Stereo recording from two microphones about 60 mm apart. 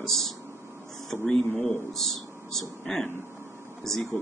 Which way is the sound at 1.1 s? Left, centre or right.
Left.